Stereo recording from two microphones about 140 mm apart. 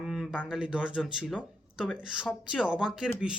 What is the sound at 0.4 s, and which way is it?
Speech, 5° right (ahead or behind).